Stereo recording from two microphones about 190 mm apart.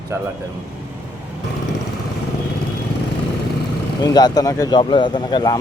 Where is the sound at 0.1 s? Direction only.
15° right (ahead or behind).